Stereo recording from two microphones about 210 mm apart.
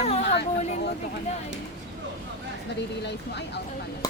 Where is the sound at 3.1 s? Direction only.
55° left (ahead or behind).